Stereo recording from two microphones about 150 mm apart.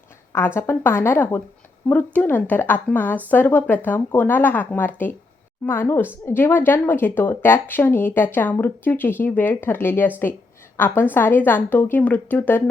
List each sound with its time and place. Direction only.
0.3 s a woman's voice: 15° left (ahead or behind)